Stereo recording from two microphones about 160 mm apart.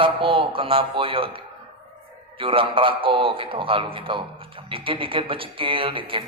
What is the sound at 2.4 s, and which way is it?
Speech, 35° right (ahead or behind).